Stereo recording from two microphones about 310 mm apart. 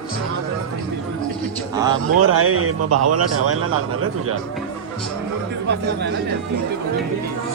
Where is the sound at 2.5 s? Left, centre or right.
Right.